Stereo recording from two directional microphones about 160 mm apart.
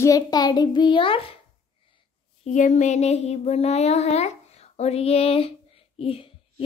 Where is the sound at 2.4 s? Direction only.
50° left (ahead or behind).